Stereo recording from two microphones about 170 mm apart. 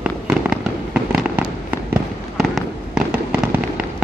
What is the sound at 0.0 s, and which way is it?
Fireworks, 5° right (ahead or behind).